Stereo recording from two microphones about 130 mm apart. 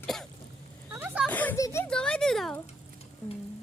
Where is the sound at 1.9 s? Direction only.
5° left (ahead or behind).